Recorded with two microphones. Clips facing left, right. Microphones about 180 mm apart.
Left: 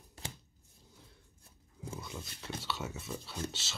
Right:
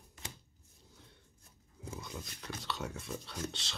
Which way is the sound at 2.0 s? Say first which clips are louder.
Even; 5° left (ahead or behind).